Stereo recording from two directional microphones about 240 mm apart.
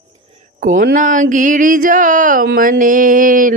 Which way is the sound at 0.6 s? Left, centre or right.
Right.